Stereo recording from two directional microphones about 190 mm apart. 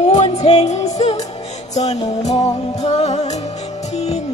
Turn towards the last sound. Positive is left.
turn(degrees=35)  # may be behind; listen again after turning